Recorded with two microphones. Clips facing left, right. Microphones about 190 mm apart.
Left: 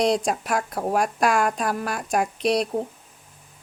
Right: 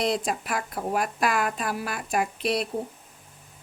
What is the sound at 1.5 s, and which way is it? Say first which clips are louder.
A woman's voice: left 4 dB; 5° right (ahead or behind).